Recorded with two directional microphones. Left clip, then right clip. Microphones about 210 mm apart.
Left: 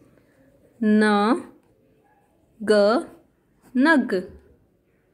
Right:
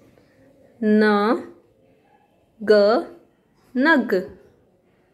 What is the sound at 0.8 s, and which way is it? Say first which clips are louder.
Speech: right 2 dB; 20° left (ahead or behind).